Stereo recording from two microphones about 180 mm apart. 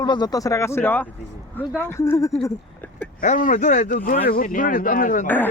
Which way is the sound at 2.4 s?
10° left (ahead or behind).